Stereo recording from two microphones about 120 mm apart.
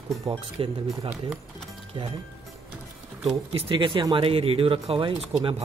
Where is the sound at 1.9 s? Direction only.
45° right (ahead or behind).